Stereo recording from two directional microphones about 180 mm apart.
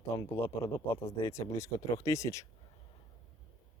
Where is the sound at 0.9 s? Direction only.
30° left (ahead or behind).